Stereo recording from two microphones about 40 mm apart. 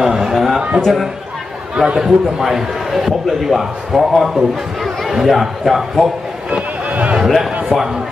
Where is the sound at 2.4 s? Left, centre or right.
Centre.